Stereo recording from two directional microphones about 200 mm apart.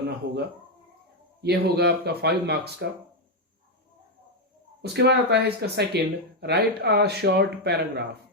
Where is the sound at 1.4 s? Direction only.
55° right (ahead or behind).